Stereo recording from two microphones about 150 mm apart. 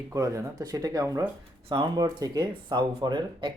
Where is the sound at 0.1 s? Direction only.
20° right (ahead or behind).